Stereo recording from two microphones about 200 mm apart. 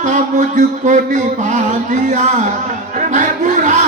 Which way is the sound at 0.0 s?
40° right (ahead or behind).